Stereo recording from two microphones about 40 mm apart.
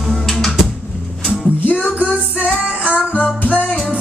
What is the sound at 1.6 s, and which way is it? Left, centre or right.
Music, left.